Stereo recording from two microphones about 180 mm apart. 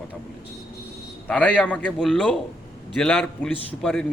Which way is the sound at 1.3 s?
5° left (ahead or behind).